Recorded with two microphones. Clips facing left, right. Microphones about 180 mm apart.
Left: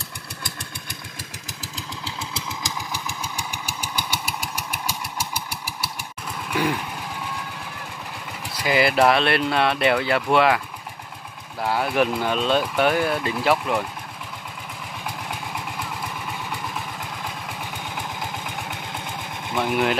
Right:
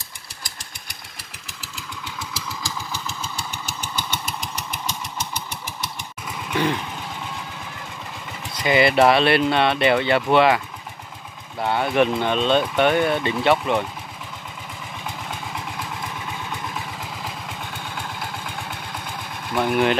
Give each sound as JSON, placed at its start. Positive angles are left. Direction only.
{"t": 2.3, "sound": "vehicle", "side_deg": 15}
{"t": 8.5, "sound": "speech", "side_deg": 0}
{"t": 11.6, "sound": "speech", "side_deg": 0}
{"t": 15.0, "sound": "vehicle", "side_deg": 5}
{"t": 17.9, "sound": "vehicle", "side_deg": 15}
{"t": 19.6, "sound": "speech", "side_deg": 0}